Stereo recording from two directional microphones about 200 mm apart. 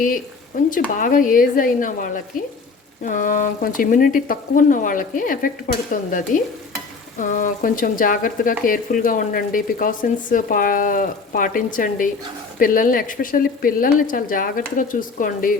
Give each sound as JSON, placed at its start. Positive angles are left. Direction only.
{"t": 0.9, "sound": "speech", "side_deg": 40}